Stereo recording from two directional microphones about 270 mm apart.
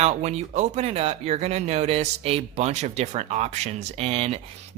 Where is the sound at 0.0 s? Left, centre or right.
Right.